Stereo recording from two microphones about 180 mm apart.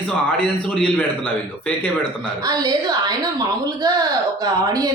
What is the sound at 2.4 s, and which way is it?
A woman's voice, 20° right (ahead or behind).